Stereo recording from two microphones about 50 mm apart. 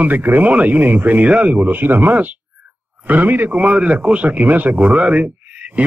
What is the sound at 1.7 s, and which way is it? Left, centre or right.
Speech, right.